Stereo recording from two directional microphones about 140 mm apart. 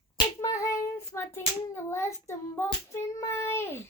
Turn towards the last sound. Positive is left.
turn(degrees=15)  # may be behind; listen again after turning